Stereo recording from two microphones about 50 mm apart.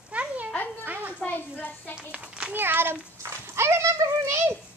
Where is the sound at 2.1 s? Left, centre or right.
Right.